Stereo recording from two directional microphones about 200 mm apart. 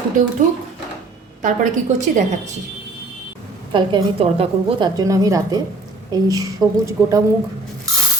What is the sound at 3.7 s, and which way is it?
A woman's voice, 25° right (ahead or behind).